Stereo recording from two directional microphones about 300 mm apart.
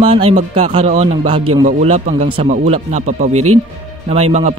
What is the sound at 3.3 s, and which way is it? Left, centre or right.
Speech, right.